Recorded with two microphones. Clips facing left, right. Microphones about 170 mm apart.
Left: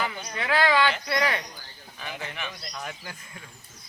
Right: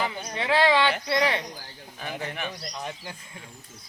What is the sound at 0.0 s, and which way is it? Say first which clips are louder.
Speech: right 2 dB; 25° right (ahead or behind).